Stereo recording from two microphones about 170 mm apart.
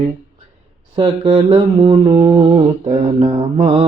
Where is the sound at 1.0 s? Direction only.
30° right (ahead or behind).